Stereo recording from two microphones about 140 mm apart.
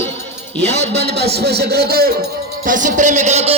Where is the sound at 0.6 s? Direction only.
50° right (ahead or behind).